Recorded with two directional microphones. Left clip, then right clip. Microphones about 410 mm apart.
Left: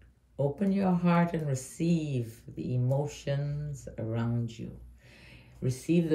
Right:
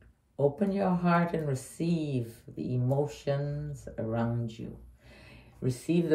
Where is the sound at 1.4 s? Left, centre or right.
Centre.